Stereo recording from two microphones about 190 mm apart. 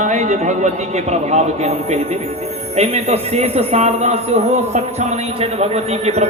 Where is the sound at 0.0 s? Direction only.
40° right (ahead or behind).